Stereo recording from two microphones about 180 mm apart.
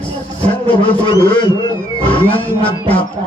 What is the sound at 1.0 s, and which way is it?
Speech, 25° left (ahead or behind).